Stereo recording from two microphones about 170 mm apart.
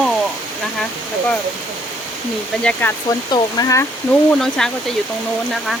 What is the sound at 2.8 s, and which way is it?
Speech, 10° left (ahead or behind).